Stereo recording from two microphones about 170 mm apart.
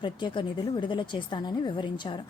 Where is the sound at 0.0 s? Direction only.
30° left (ahead or behind).